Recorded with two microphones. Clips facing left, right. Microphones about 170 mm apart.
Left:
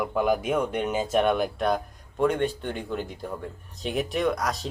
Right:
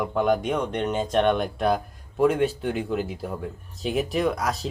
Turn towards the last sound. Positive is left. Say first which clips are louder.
# right 1 dB
turn(degrees=0)  # may be behind; listen again after turning